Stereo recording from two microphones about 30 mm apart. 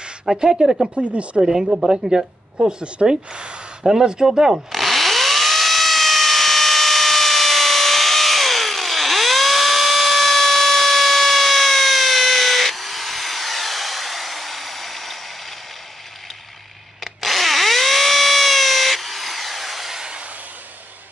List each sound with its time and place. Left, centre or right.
0.4 s speech: centre
0.9 s speech: right
1.4 s speech: centre
2.0 s speech: right
2.6 s speech: right
3.8 s speech: right
4.7 s a sound: centre
17.0 s drill: centre